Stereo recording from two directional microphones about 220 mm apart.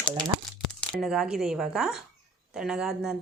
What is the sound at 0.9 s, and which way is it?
A woman's voice, centre (ahead or behind).